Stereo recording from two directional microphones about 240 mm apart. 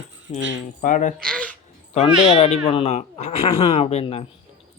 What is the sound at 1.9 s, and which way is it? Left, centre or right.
Speech, left.